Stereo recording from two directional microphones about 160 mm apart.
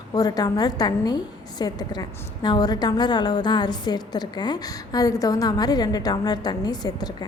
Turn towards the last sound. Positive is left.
turn(degrees=25)  # may be behind; listen again after turning